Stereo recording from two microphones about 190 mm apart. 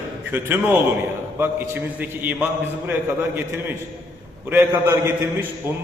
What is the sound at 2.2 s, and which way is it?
A man's voice, 10° right (ahead or behind).